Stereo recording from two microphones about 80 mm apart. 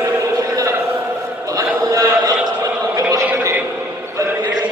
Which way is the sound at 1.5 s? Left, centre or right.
Right.